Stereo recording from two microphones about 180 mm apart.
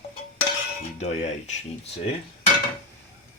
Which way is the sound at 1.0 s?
40° left (ahead or behind).